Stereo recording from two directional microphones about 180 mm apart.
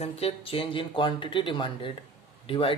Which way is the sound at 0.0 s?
35° left (ahead or behind).